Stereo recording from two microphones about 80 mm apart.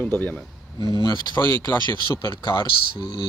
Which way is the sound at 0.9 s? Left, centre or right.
Left.